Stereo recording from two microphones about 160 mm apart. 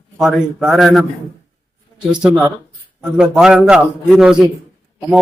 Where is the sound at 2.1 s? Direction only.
5° right (ahead or behind).